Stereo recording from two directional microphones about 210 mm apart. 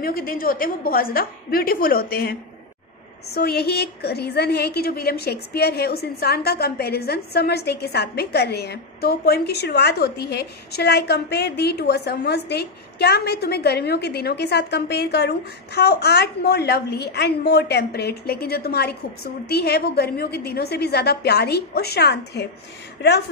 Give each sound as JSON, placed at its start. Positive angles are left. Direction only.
{"t": 0.0, "sound": "a woman's voice", "side_deg": 45}
{"t": 3.3, "sound": "a woman's voice", "side_deg": 50}